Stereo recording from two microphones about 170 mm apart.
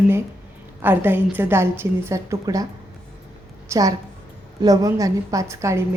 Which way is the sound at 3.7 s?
20° right (ahead or behind).